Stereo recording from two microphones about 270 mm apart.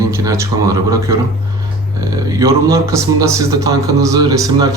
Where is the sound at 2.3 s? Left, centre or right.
Centre.